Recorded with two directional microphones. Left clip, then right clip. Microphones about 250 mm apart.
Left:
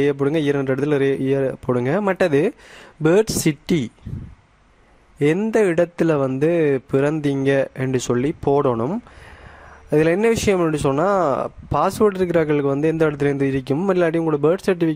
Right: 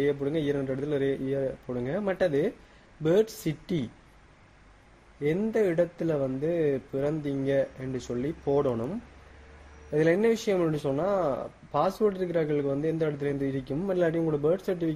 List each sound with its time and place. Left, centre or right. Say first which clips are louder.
0.0 s speech: left 9 dB; left
5.2 s speech: left 9 dB; left